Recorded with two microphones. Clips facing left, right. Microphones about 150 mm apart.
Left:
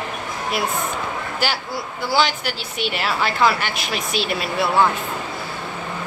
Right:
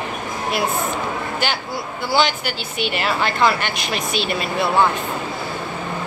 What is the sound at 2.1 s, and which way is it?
Speech, centre (ahead or behind).